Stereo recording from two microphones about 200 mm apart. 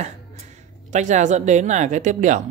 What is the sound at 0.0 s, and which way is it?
Speech, 35° right (ahead or behind).